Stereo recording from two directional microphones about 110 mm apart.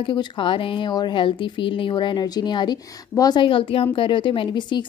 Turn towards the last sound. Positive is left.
turn(degrees=45)  # may be behind; listen again after turning